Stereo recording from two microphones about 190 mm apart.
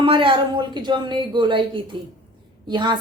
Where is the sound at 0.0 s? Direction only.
25° right (ahead or behind).